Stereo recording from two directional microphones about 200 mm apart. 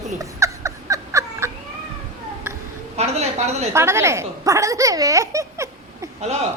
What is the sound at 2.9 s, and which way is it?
Speech, 35° right (ahead or behind).